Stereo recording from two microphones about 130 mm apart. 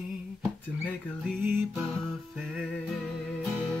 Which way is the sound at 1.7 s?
5° left (ahead or behind).